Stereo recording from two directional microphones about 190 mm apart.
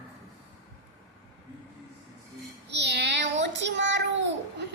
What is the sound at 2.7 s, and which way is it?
Child singing, 65° right (ahead or behind).